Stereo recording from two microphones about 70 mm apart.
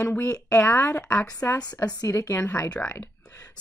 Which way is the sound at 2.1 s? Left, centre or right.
Left.